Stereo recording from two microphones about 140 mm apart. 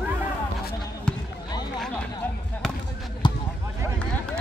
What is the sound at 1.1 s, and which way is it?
Basketball bounce, 5° left (ahead or behind).